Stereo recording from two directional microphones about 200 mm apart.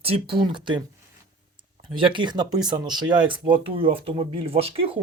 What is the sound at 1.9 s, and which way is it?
Speech, 25° right (ahead or behind).